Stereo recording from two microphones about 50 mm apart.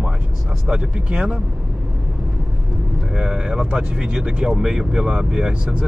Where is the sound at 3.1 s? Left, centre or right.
Centre.